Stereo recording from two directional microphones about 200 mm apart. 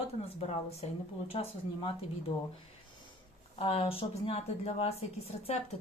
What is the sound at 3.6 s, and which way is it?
Speech, 30° left (ahead or behind).